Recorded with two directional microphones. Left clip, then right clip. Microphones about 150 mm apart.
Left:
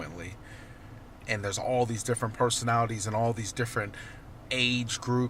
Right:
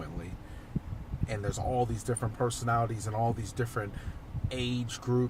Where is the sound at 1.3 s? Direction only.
10° left (ahead or behind).